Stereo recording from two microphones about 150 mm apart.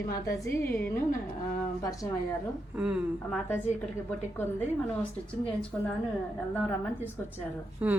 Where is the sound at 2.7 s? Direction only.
10° right (ahead or behind).